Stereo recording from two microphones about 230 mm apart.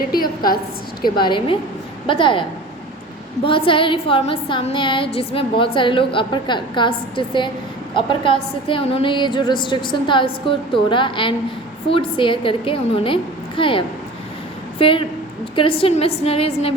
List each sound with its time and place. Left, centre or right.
0.1 s a woman's voice: left
1.0 s a woman's voice: centre